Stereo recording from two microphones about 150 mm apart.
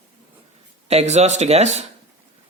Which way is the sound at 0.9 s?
45° right (ahead or behind).